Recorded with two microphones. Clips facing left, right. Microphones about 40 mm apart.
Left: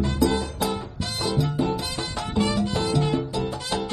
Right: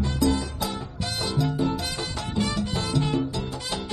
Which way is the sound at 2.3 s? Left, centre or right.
Left.